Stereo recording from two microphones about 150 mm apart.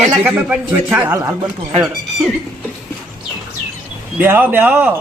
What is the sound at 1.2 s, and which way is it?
Speech, 20° right (ahead or behind).